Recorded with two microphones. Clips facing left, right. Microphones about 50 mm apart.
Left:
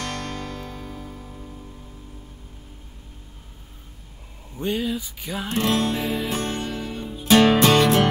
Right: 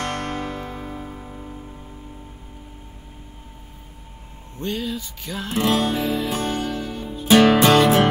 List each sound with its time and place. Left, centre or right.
0.0 s music: right
4.6 s music: centre
5.5 s music: centre
6.4 s music: centre
6.7 s music: centre
7.2 s music: centre